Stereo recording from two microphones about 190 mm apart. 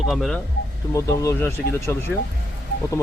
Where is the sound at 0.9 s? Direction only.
15° left (ahead or behind).